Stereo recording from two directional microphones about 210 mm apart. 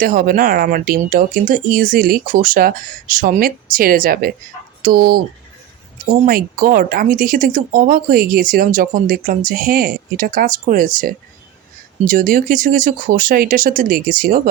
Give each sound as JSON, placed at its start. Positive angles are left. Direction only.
{"t": 0.0, "sound": "speech", "side_deg": -40}
{"t": 6.2, "sound": "speech", "side_deg": -40}